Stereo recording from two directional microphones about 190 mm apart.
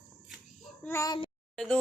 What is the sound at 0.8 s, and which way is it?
Speech, 15° left (ahead or behind).